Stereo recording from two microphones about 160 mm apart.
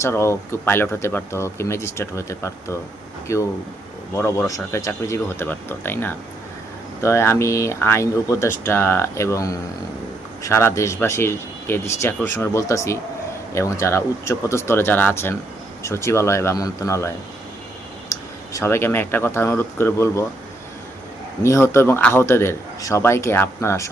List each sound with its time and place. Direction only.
0.0 s speech: 15° left (ahead or behind)
18.5 s speech: 15° left (ahead or behind)
21.4 s speech: 15° left (ahead or behind)